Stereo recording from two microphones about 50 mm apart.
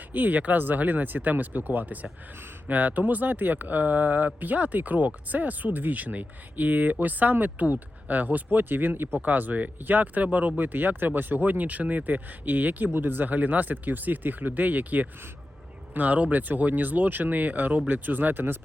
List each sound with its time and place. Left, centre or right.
0.1 s speech: right
17.8 s speech: right